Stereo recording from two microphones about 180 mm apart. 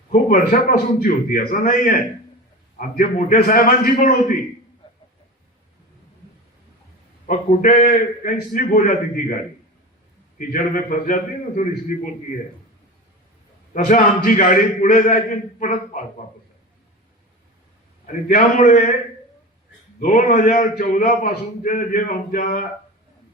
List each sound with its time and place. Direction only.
0.1 s a man's voice: 50° left (ahead or behind)
7.3 s a man's voice: 50° left (ahead or behind)
10.3 s a man's voice: 50° left (ahead or behind)
13.7 s a man's voice: 45° left (ahead or behind)
18.0 s a man's voice: 45° left (ahead or behind)
20.0 s a man's voice: 45° left (ahead or behind)